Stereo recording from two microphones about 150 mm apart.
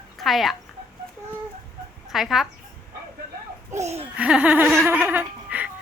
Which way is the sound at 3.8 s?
45° right (ahead or behind).